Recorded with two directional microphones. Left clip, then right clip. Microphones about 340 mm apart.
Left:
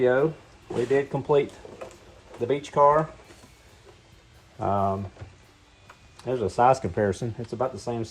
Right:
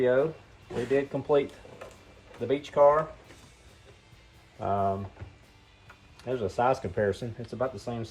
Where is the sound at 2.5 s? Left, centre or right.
Left.